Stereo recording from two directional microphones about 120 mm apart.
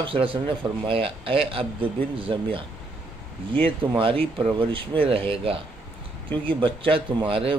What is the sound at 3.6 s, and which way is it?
Speech, 45° right (ahead or behind).